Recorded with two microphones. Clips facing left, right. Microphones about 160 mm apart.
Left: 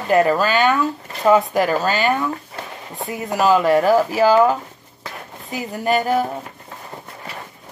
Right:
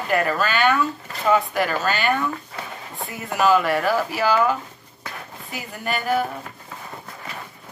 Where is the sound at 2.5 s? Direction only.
20° left (ahead or behind).